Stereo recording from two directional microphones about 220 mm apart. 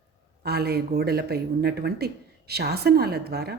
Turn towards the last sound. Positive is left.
turn(degrees=-45)  # may be behind; listen again after turning